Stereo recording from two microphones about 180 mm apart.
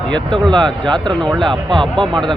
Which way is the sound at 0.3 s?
25° right (ahead or behind).